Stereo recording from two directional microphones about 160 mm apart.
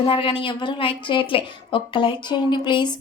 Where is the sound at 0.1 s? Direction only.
35° left (ahead or behind).